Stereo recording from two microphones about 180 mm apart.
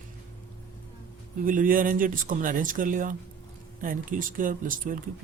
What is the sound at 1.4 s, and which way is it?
Speech, 50° right (ahead or behind).